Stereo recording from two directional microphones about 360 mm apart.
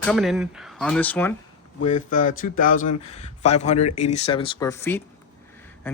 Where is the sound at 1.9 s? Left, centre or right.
Left.